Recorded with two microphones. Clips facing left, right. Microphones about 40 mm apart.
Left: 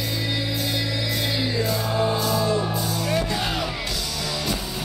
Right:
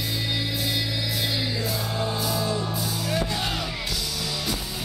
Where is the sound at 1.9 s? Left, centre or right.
Centre.